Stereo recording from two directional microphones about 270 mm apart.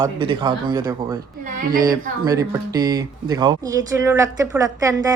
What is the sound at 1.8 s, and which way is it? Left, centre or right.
Speech, centre.